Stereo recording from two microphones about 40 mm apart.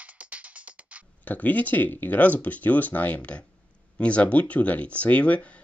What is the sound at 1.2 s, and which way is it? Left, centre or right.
Speech, left.